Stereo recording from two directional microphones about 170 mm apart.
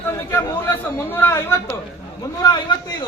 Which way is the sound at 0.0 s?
15° left (ahead or behind).